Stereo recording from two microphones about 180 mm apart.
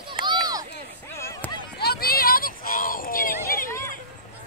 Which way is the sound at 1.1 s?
15° left (ahead or behind).